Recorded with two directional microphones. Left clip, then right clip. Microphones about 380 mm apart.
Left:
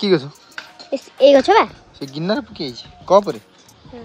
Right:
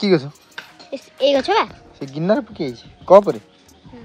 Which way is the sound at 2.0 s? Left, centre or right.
Centre.